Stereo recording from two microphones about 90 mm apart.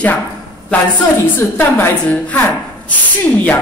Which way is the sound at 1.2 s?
25° left (ahead or behind).